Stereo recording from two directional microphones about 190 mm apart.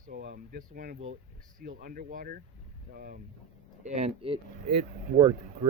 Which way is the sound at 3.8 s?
35° right (ahead or behind).